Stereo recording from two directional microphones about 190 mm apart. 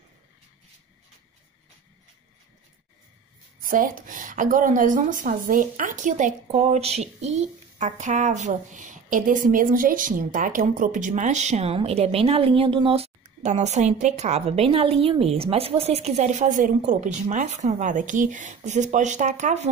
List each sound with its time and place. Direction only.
3.6 s a woman's voice: 45° right (ahead or behind)